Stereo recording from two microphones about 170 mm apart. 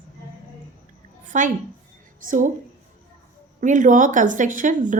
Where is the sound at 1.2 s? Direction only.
50° right (ahead or behind).